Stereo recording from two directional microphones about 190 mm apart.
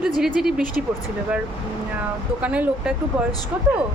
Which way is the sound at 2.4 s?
5° right (ahead or behind).